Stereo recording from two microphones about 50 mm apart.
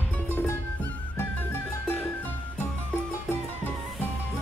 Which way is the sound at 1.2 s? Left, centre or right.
Left.